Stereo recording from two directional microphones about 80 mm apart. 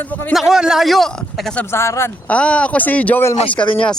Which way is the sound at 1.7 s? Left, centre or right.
Left.